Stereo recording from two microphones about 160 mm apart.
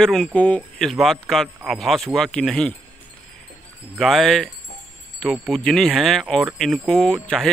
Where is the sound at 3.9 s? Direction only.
Centre (ahead or behind).